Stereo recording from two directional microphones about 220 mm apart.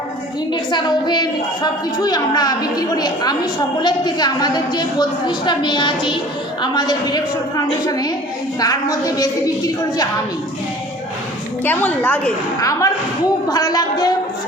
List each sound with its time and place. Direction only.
0.5 s a woman's voice: 20° left (ahead or behind)
11.6 s a woman's voice: 10° left (ahead or behind)